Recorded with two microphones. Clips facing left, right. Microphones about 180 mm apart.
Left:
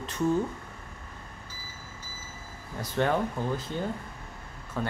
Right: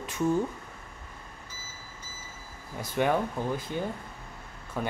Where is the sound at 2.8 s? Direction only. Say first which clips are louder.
Even; 10° right (ahead or behind).